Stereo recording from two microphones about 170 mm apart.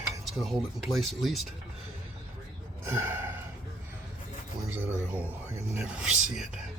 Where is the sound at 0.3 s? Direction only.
Centre (ahead or behind).